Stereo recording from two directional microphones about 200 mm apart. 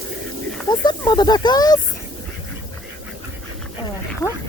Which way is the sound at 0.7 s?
20° left (ahead or behind).